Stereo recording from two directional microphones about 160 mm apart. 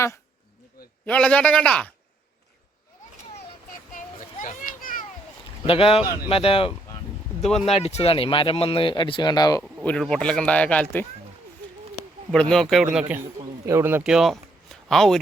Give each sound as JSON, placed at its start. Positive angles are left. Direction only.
{"t": 1.0, "sound": "speech", "side_deg": 10}
{"t": 3.9, "sound": "children playing", "side_deg": 55}
{"t": 5.6, "sound": "speech", "side_deg": 35}
{"t": 9.8, "sound": "speech", "side_deg": 5}
{"t": 12.3, "sound": "a man's voice", "side_deg": 5}